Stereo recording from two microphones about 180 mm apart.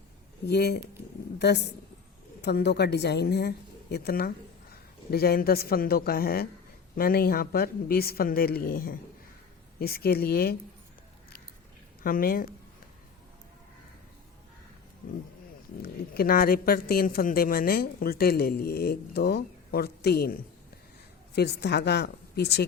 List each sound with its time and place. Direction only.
0.4 s a woman's voice: 65° left (ahead or behind)
12.0 s a woman's voice: 55° left (ahead or behind)
15.0 s a woman's voice: 55° left (ahead or behind)